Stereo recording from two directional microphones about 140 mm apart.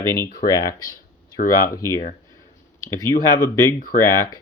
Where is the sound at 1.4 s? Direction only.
90° left.